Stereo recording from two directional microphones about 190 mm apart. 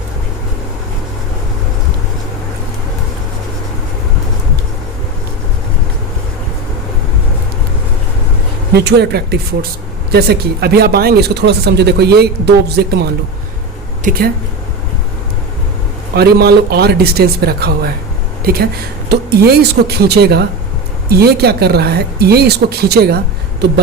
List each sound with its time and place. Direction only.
8.7 s speech: 60° right (ahead or behind)
14.0 s speech: 50° right (ahead or behind)
16.1 s speech: 55° right (ahead or behind)